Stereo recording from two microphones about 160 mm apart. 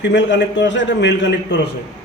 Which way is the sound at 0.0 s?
90° left.